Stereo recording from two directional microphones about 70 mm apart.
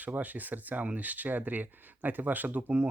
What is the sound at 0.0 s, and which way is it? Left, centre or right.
Speech, right.